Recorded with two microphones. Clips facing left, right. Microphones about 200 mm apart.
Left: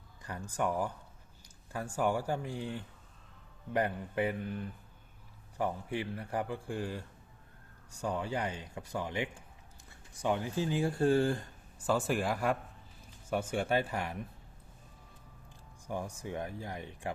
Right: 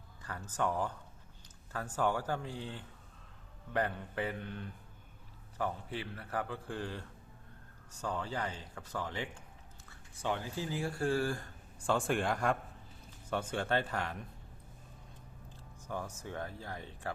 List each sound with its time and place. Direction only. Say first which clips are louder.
0.2 s speech: left 1 dB; 15° left (ahead or behind)
11.9 s speech: left 1 dB; 5° left (ahead or behind)
15.9 s speech: left 3 dB; 15° left (ahead or behind)